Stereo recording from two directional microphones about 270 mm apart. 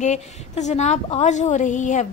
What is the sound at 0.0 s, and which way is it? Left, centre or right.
A woman's voice, left.